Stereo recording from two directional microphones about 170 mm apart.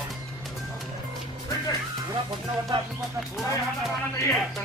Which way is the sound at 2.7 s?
30° right (ahead or behind).